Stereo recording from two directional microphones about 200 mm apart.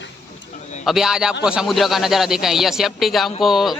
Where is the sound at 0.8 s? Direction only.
Centre (ahead or behind).